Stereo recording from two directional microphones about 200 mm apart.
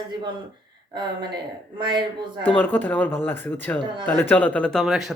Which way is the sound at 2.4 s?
10° left (ahead or behind).